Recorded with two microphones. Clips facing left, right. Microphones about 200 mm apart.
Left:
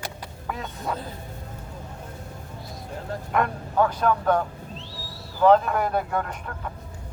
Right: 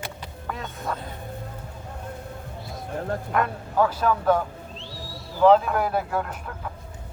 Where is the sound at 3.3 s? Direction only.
Centre (ahead or behind).